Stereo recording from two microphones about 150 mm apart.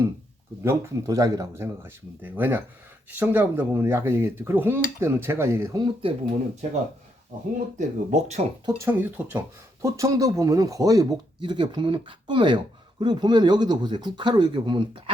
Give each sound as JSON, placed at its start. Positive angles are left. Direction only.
{"t": 0.6, "sound": "speech", "side_deg": -20}
{"t": 5.7, "sound": "speech", "side_deg": -35}
{"t": 7.8, "sound": "speech", "side_deg": -50}
{"t": 8.6, "sound": "speech", "side_deg": -15}